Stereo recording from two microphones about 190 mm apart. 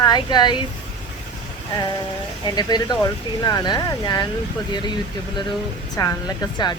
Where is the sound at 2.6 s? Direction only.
20° left (ahead or behind).